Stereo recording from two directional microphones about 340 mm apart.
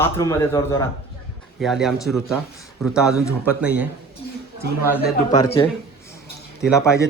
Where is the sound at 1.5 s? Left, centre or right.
Centre.